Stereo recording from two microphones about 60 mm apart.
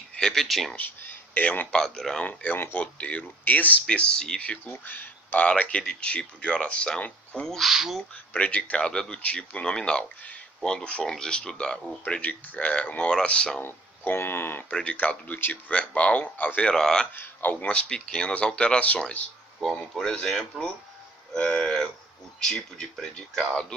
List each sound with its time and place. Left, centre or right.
0.1 s speech: centre
0.8 s a sound: left
1.7 s speech: centre
2.2 s speech: left
3.8 s speech: centre
4.6 s speech: left; by 7.0 s centre
7.6 s speech: centre
8.1 s speech: left
13.6 s speech: left
14.7 s speech: centre
16.7 s speech: centre
17.2 s speech: left
19.6 s speech: centre